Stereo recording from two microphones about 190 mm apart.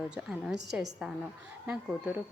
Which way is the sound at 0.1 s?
5° right (ahead or behind).